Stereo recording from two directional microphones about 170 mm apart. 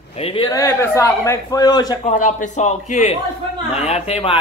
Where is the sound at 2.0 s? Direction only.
45° left (ahead or behind).